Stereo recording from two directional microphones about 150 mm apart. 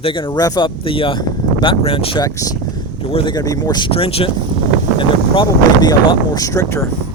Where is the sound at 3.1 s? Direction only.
40° left (ahead or behind).